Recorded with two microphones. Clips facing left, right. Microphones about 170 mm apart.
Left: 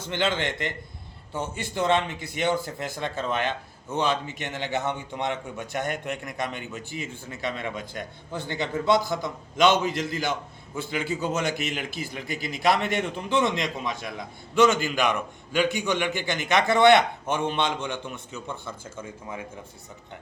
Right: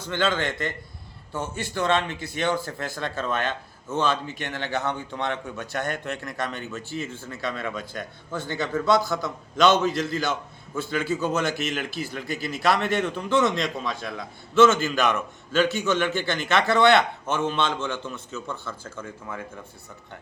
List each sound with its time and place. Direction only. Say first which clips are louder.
0.0 s a man's voice: right 1 dB; 20° left (ahead or behind)